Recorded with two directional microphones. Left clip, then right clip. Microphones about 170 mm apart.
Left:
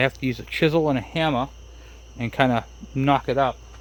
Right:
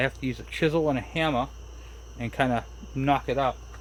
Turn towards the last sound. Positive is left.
turn(degrees=60)  # may be behind; listen again after turning